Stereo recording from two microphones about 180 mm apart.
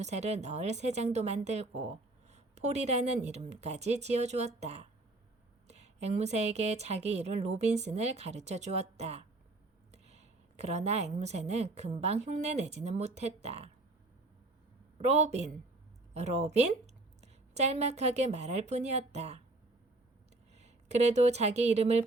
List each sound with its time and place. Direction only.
0.0 s speech: 40° right (ahead or behind)
14.9 s a woman's voice: 40° right (ahead or behind)
20.6 s speech: 40° right (ahead or behind)